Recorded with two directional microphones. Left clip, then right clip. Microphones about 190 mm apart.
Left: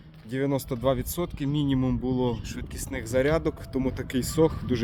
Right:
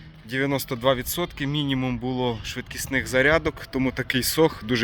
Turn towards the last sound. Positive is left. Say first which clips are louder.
# right 3 dB
turn(degrees=5)  # may be behind; listen again after turning